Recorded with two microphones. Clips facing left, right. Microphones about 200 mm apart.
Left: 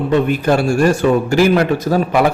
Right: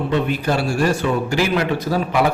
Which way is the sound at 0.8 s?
45° left (ahead or behind).